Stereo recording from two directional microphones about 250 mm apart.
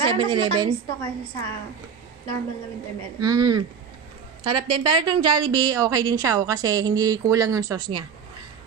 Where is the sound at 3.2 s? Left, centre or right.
Centre.